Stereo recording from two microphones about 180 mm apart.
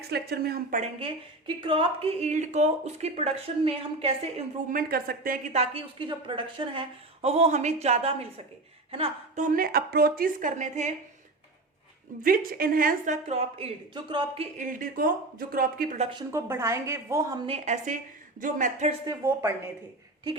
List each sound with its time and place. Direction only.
0.1 s speech: 60° right (ahead or behind)
0.8 s a woman's voice: 30° right (ahead or behind)
4.7 s speech: 55° right (ahead or behind)
5.5 s a woman's voice: 30° right (ahead or behind)
9.4 s a woman's voice: 50° right (ahead or behind)
12.2 s a woman's voice: 50° right (ahead or behind)
13.2 s a woman's voice: 35° right (ahead or behind)
14.6 s a woman's voice: 50° right (ahead or behind)
16.3 s a woman's voice: 15° right (ahead or behind)
17.4 s a woman's voice: 35° right (ahead or behind)
19.0 s a woman's voice: 15° right (ahead or behind)